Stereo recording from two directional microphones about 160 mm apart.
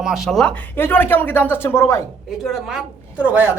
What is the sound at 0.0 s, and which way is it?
Speech, centre (ahead or behind).